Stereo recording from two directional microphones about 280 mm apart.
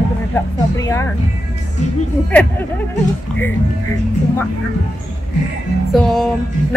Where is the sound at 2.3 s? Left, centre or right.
Centre.